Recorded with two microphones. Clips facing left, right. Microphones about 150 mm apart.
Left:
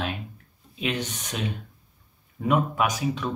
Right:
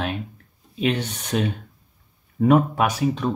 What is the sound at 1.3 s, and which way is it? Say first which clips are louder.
Speech: right 8 dB; 55° right (ahead or behind).